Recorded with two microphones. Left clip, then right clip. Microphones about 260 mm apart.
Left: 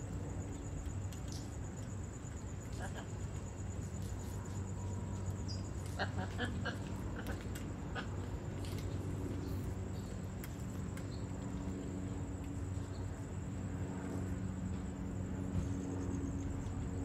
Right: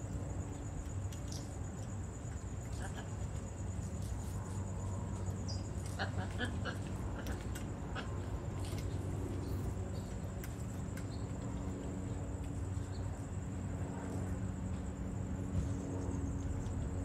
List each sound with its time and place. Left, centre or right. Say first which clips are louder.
5.9 s vehicle: even; left